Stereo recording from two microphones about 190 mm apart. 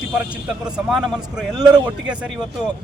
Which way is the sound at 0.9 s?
Centre (ahead or behind).